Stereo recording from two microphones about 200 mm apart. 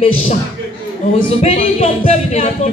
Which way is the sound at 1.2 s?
30° left (ahead or behind).